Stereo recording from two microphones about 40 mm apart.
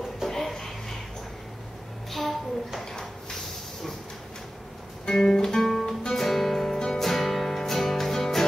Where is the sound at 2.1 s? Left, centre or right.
Centre.